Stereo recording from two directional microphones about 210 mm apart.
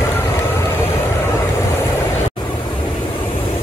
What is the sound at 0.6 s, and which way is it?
Vehicle, 10° left (ahead or behind).